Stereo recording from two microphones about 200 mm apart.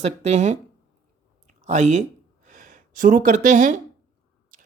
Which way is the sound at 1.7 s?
35° right (ahead or behind).